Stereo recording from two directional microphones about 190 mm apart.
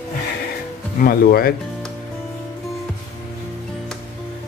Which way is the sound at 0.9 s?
50° left (ahead or behind).